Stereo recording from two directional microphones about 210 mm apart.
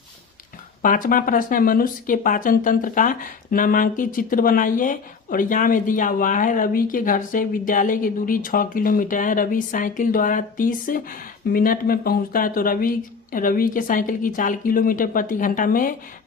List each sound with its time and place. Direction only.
0.8 s speech: 40° left (ahead or behind)